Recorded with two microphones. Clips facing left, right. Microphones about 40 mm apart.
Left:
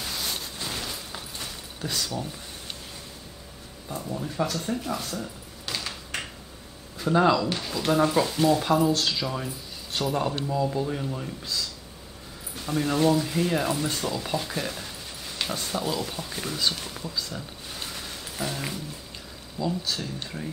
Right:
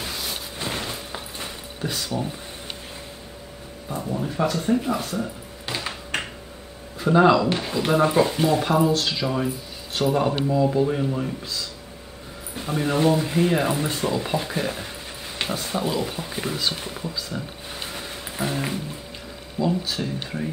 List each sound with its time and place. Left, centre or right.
0.6 s a sound: right
3.9 s speech: centre
7.0 s speech: centre
12.5 s speech: centre
17.7 s a sound: right
19.6 s speech: centre